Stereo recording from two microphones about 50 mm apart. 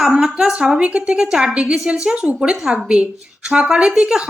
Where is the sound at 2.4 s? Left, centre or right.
Centre.